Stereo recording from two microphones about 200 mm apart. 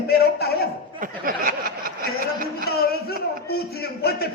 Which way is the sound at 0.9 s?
45° right (ahead or behind).